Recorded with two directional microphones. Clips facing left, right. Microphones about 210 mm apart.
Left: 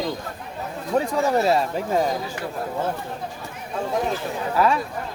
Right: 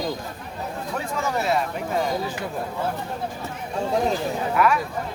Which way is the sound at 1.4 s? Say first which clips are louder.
Left 4 dB; 30° left (ahead or behind).